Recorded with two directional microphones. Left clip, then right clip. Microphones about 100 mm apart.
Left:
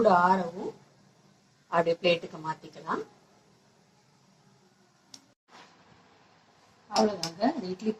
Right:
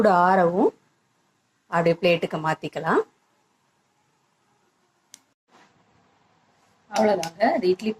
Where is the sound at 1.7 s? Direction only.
25° right (ahead or behind).